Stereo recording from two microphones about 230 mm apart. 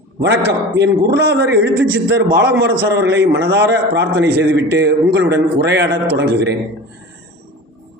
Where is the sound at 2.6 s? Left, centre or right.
Right.